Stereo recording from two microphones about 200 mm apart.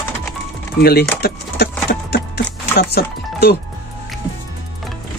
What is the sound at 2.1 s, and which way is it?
Music, 55° left (ahead or behind).